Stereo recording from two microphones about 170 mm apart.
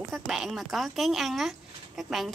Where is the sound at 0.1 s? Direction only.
Centre (ahead or behind).